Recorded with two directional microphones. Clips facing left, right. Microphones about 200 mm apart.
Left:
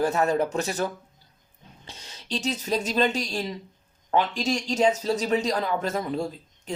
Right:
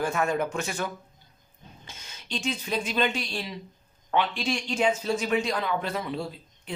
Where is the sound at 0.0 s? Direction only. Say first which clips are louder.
Left 4 dB; 35° left (ahead or behind).